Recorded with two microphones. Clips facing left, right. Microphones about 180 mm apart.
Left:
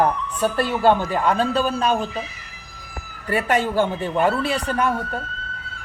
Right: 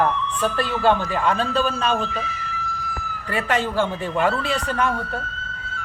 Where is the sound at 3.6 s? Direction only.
15° left (ahead or behind).